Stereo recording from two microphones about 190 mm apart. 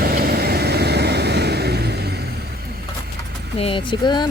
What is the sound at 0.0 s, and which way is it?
Vehicle, 55° right (ahead or behind).